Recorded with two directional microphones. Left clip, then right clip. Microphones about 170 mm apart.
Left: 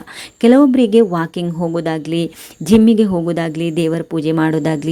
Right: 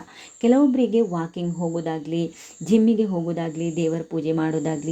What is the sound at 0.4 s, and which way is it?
A woman's voice, 40° left (ahead or behind).